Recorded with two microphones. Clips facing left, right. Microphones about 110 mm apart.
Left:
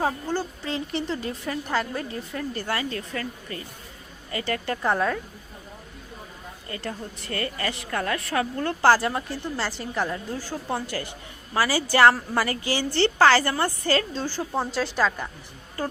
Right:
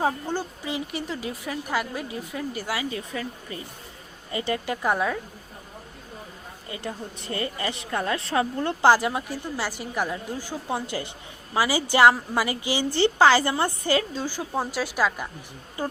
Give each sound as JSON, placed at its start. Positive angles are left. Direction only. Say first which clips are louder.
{"t": 0.0, "sound": "a woman's voice", "louder": "even", "side_deg": -15}
{"t": 6.7, "sound": "a woman's voice", "louder": "even", "side_deg": -15}